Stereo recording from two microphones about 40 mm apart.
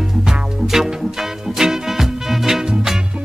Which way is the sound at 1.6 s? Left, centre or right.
Centre.